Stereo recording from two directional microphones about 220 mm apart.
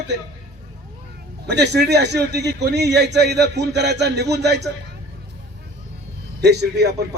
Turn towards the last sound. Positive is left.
turn(degrees=-50)  # may be behind; listen again after turning